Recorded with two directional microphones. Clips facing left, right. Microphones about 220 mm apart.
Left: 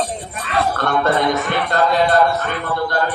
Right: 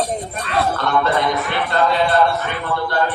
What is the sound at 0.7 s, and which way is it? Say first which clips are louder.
Music: left 3 dB; 50° left (ahead or behind).